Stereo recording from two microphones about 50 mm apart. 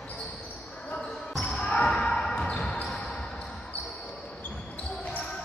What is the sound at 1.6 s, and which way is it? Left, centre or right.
Basketball bounce, centre.